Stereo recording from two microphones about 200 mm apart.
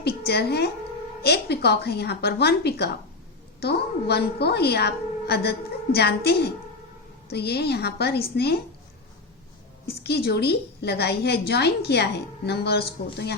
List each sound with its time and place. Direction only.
0.3 s a woman's voice: 55° left (ahead or behind)
10.0 s a woman's voice: 55° left (ahead or behind)